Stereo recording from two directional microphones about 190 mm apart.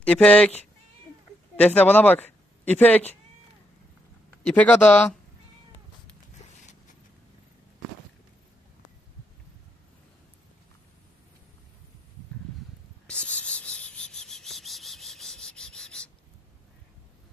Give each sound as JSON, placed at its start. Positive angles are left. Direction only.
{"t": 0.0, "sound": "speech", "side_deg": 5}
{"t": 1.6, "sound": "speech", "side_deg": 10}
{"t": 4.5, "sound": "speech", "side_deg": 5}
{"t": 13.0, "sound": "cricket", "side_deg": 5}